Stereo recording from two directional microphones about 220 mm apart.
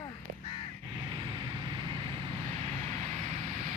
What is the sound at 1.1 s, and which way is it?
Vehicle, 20° right (ahead or behind).